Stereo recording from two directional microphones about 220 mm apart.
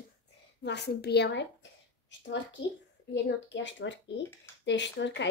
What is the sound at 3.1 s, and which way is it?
Speech, 55° left (ahead or behind).